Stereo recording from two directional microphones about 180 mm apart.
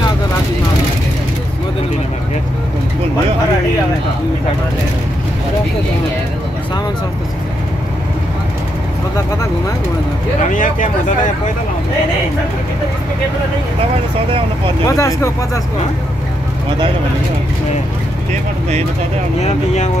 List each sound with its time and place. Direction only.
10.5 s speech: 45° left (ahead or behind)
14.9 s speech: 15° left (ahead or behind)
19.4 s speech: 40° left (ahead or behind)